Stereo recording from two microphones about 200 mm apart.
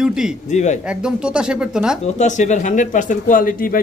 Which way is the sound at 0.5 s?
35° left (ahead or behind).